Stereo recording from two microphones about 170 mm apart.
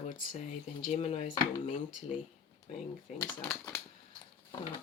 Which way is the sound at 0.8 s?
35° left (ahead or behind).